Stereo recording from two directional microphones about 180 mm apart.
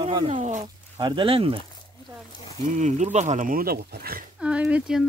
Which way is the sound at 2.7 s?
40° right (ahead or behind).